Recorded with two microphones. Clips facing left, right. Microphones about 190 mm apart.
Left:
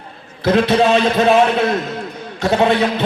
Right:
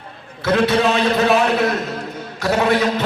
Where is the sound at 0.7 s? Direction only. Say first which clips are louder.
Left 3 dB; 30° left (ahead or behind).